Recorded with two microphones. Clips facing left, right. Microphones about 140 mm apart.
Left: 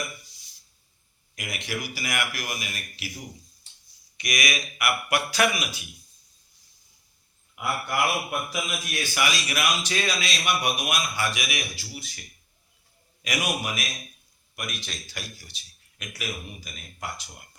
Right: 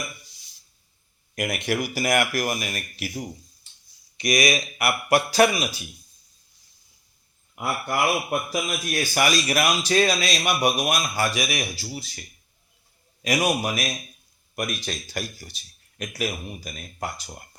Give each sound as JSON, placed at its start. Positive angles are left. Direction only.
{"t": 1.4, "sound": "speech", "side_deg": -50}
{"t": 4.2, "sound": "a man's voice", "side_deg": -30}
{"t": 7.5, "sound": "a man's voice", "side_deg": -40}
{"t": 13.2, "sound": "a man's voice", "side_deg": -35}